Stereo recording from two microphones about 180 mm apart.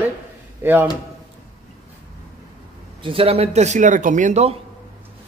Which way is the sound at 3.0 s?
30° right (ahead or behind).